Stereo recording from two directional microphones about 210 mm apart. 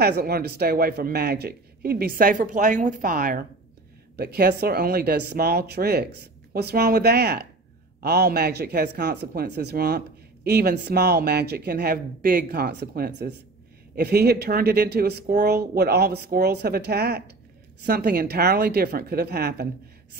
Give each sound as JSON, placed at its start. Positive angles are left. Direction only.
{"t": 0.0, "sound": "speech", "side_deg": -50}